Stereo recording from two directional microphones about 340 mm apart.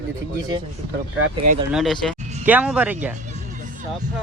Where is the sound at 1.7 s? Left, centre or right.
Centre.